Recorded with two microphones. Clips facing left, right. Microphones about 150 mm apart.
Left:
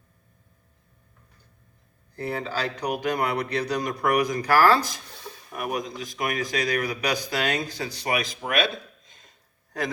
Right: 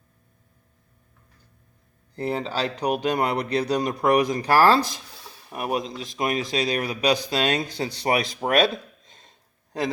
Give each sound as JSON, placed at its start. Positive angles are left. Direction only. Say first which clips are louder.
{"t": 2.1, "sound": "a man's voice", "louder": "right 3 dB", "side_deg": -25}